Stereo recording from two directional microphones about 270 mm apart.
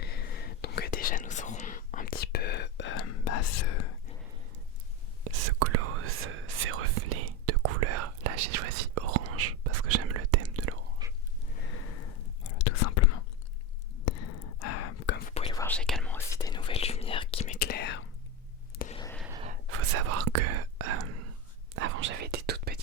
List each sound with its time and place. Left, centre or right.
0.0 s whispering: left
5.5 s whispering: right
11.0 s a sound: centre
12.5 s whispering: left
14.0 s sigh: left
15.3 s whispering: left
15.6 s whispering: centre; by 17.6 s left
17.6 s whispering: left
19.7 s whispering: right
21.7 s whispering: right